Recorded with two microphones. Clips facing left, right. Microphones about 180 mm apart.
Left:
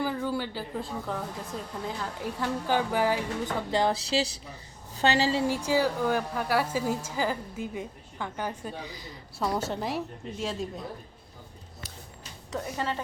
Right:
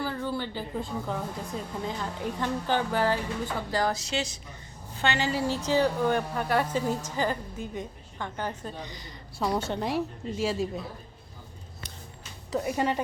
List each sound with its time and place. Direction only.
0.0 s speech: 10° left (ahead or behind)
3.7 s speech: 25° left (ahead or behind)
5.5 s a woman's voice: 10° left (ahead or behind)
12.5 s a woman's voice: 10° right (ahead or behind)